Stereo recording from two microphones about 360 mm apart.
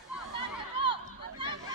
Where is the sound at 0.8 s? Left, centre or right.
Centre.